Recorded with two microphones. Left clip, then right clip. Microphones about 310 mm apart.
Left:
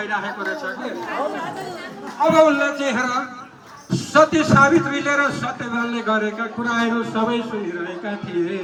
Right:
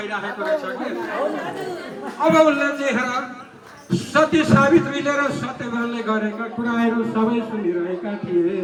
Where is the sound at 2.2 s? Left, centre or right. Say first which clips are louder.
Left 1 dB; left.